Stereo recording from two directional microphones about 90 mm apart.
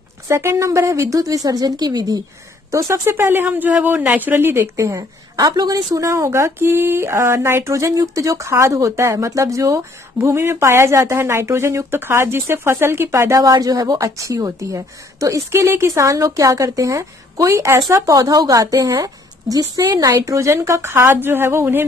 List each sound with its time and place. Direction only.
0.3 s speech: 30° right (ahead or behind); by 2.2 s 45° right (ahead or behind)
2.7 s speech: 35° right (ahead or behind)
13.4 s speech: 45° right (ahead or behind)
20.2 s speech: 35° right (ahead or behind)